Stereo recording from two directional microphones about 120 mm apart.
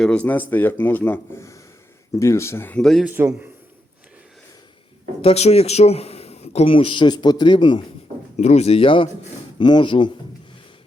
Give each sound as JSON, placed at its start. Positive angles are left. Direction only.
{"t": 0.0, "sound": "speech", "side_deg": 10}
{"t": 2.1, "sound": "speech", "side_deg": 25}
{"t": 3.0, "sound": "a man's voice", "side_deg": -15}
{"t": 5.2, "sound": "a man's voice", "side_deg": 60}
{"t": 8.4, "sound": "a man's voice", "side_deg": 70}